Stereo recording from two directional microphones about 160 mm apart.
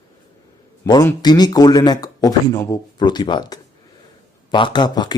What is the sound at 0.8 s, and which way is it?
A man's voice, 25° left (ahead or behind).